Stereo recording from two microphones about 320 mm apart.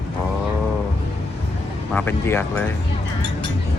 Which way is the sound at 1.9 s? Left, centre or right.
Centre.